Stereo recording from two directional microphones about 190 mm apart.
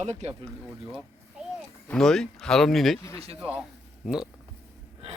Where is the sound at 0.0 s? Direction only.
35° right (ahead or behind).